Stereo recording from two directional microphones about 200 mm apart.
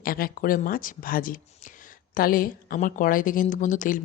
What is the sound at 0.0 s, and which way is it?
Speech, 45° left (ahead or behind).